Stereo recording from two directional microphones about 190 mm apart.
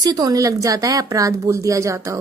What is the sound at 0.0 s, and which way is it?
A woman's voice, 20° right (ahead or behind).